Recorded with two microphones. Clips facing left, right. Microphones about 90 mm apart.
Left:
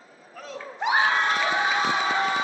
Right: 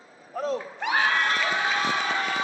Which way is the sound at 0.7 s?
20° left (ahead or behind).